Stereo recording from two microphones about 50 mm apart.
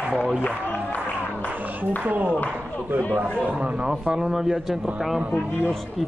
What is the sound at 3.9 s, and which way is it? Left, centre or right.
Speech, centre.